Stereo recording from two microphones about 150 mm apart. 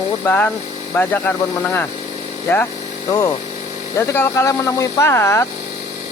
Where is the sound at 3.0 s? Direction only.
20° left (ahead or behind).